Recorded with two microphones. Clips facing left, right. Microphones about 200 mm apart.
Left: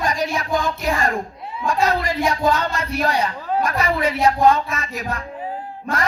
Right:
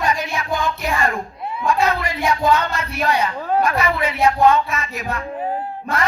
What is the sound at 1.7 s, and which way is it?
Music, 35° left (ahead or behind).